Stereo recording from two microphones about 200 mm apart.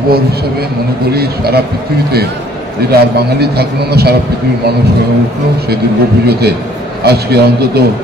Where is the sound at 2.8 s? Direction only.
50° right (ahead or behind).